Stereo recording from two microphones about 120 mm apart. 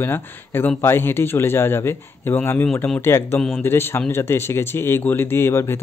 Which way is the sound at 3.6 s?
20° left (ahead or behind).